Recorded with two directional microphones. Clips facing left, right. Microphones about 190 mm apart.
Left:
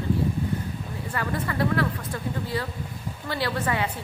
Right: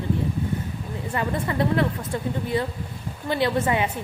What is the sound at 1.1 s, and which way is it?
Speech, 20° right (ahead or behind).